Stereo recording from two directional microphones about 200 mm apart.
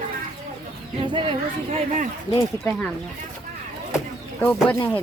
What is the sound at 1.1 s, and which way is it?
Speech, 25° right (ahead or behind).